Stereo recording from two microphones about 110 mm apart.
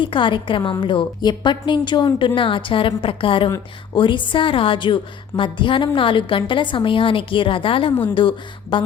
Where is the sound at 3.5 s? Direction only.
30° left (ahead or behind).